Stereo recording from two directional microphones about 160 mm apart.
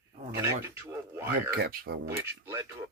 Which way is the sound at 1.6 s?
80° right.